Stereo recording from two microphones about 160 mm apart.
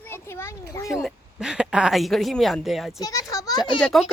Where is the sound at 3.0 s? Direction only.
20° left (ahead or behind).